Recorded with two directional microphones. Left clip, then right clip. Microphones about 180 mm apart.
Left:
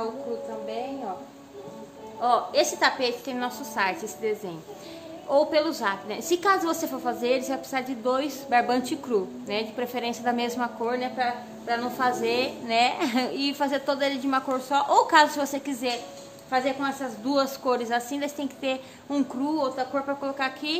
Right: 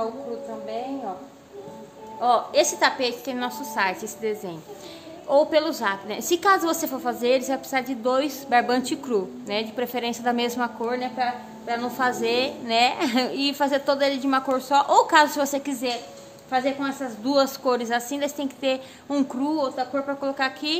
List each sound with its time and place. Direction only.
2.1 s a woman's voice: 15° right (ahead or behind)